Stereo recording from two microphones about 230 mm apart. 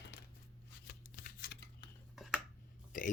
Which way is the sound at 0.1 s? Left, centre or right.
Left.